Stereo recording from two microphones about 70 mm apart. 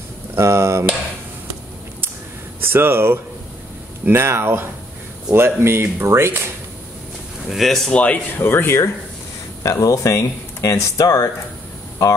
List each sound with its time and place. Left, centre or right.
0.3 s a sound: right
2.6 s speech: right
7.4 s speech: centre
7.9 s speech: left
8.4 s speech: left
9.6 s speech: left